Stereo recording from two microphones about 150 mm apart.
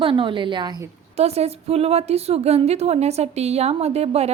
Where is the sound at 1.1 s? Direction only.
45° right (ahead or behind).